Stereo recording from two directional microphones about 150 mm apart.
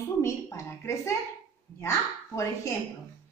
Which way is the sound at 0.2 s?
20° left (ahead or behind).